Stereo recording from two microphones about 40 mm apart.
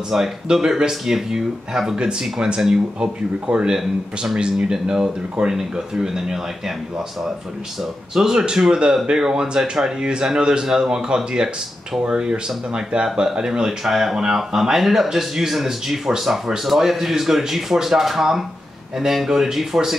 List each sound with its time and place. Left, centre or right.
0.5 s speech: centre
8.1 s speech: centre